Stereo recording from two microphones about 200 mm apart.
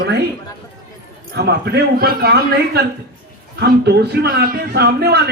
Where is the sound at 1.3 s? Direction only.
55° right (ahead or behind).